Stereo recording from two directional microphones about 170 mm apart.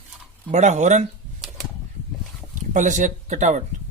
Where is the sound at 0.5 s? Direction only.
45° right (ahead or behind).